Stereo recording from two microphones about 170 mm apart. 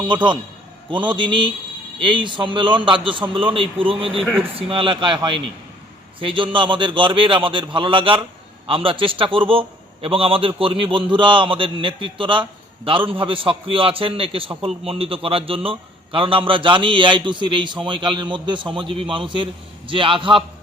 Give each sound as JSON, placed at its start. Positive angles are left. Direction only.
{"t": 0.9, "sound": "a man's voice", "side_deg": -30}
{"t": 4.2, "sound": "speech", "side_deg": -10}
{"t": 4.5, "sound": "a man's voice", "side_deg": -30}